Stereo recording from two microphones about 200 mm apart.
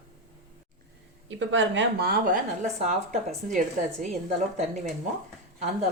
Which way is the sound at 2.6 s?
35° right (ahead or behind).